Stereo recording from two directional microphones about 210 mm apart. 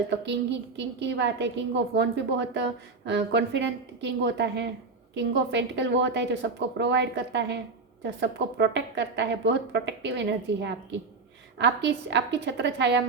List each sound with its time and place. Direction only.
0.8 s a woman's voice: 55° right (ahead or behind)